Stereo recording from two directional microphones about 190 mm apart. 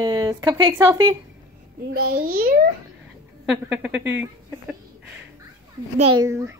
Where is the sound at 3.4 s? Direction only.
5° right (ahead or behind).